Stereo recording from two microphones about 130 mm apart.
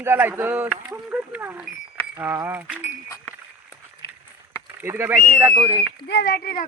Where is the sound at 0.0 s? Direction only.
15° right (ahead or behind).